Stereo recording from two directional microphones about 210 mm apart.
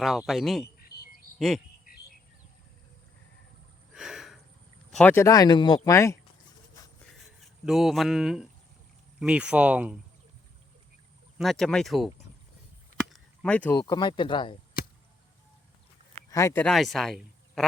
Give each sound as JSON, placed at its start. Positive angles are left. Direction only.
{"t": 0.0, "sound": "speech", "side_deg": 0}
{"t": 3.9, "sound": "a sound", "side_deg": 0}
{"t": 4.9, "sound": "speech", "side_deg": 5}
{"t": 7.0, "sound": "a sound", "side_deg": 0}
{"t": 9.2, "sound": "speech", "side_deg": -5}
{"t": 11.3, "sound": "speech", "side_deg": 0}
{"t": 13.1, "sound": "a sound", "side_deg": 5}
{"t": 13.8, "sound": "speech", "side_deg": 20}
{"t": 16.3, "sound": "speech", "side_deg": 15}